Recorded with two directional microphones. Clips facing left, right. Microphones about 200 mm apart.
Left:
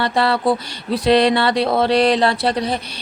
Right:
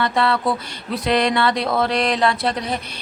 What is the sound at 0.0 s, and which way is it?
A woman's voice, 35° left (ahead or behind).